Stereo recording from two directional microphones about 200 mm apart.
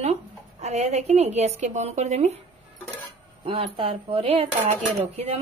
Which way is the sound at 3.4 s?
25° right (ahead or behind).